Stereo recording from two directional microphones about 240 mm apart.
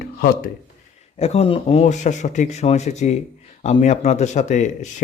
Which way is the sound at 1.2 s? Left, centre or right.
Left.